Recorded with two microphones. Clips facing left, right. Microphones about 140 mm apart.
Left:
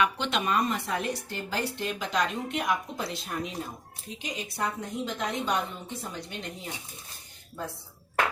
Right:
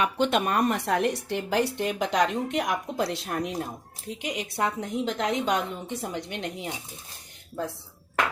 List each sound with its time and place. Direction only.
0.0 s speech: 50° right (ahead or behind); by 6.7 s 70° right (ahead or behind)